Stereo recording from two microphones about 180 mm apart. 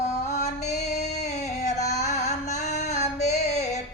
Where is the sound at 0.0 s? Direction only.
40° left (ahead or behind).